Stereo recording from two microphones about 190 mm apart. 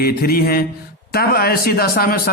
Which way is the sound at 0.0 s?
55° left (ahead or behind).